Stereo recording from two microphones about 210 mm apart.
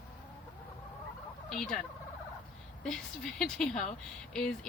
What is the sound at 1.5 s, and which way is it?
Fowl, 5° left (ahead or behind).